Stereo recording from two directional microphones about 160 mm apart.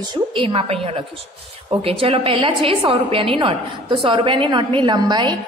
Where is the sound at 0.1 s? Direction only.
30° right (ahead or behind).